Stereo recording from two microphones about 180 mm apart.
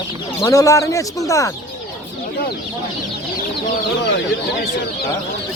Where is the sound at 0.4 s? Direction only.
20° left (ahead or behind).